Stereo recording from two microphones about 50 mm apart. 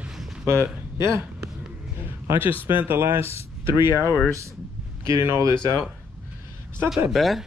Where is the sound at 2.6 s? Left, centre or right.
Right.